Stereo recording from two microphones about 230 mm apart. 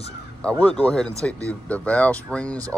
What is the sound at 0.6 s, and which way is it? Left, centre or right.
Speech, centre.